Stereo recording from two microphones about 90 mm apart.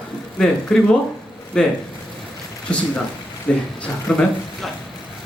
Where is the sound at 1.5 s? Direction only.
10° left (ahead or behind).